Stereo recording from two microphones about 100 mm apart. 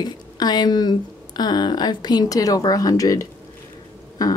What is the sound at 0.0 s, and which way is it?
Speech, 45° left (ahead or behind).